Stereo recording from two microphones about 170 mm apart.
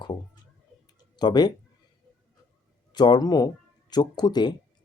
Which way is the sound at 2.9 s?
25° left (ahead or behind).